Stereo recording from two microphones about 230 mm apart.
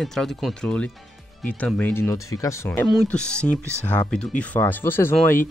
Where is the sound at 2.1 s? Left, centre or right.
Left.